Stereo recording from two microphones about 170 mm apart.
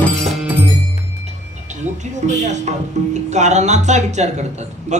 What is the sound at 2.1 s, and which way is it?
Speech, 45° right (ahead or behind).